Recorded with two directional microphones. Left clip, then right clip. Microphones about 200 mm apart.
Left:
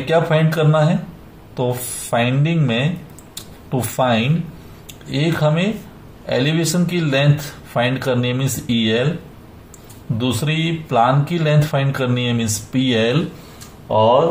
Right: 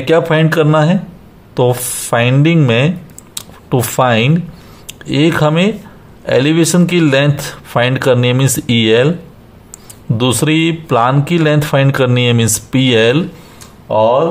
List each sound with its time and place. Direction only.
0.1 s speech: 55° right (ahead or behind)
3.3 s a sound: 55° right (ahead or behind)
4.8 s speech: 55° right (ahead or behind)
10.1 s speech: 50° right (ahead or behind)
13.8 s speech: 15° right (ahead or behind)